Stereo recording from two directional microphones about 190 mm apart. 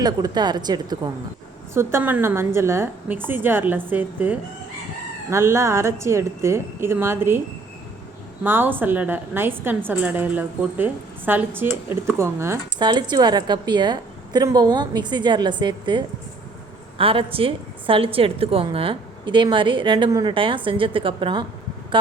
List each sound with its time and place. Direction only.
0.0 s a woman's voice: 20° right (ahead or behind)
8.4 s a woman's voice: 10° right (ahead or behind)